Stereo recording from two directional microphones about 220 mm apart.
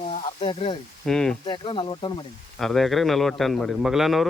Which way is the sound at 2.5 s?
Centre (ahead or behind).